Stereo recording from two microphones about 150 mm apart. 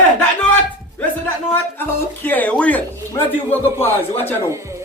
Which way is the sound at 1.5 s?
15° left (ahead or behind).